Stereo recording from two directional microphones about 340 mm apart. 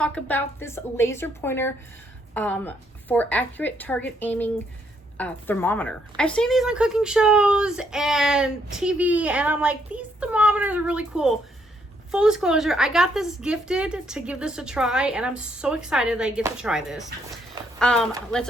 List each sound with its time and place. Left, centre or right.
0.0 s a woman's voice: centre